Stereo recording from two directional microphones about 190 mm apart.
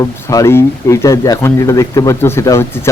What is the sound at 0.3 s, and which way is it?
Speech, 15° left (ahead or behind).